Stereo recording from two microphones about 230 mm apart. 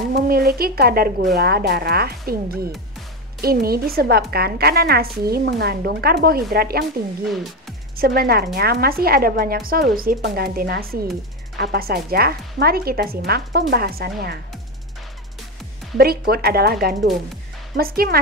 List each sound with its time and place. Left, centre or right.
0.1 s speech: right
7.9 s speech: right
16.0 s speech: right